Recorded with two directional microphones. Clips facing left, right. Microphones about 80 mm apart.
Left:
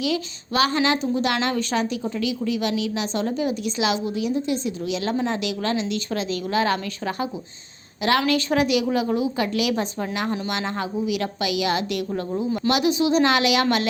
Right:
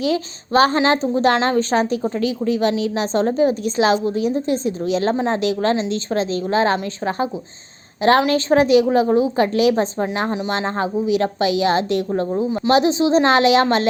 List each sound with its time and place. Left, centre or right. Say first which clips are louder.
0.0 s a woman's voice: right 4 dB; right
8.3 s a woman's voice: right 6 dB; right